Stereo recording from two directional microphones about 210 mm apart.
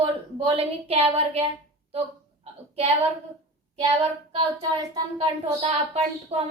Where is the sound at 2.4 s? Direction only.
30° right (ahead or behind).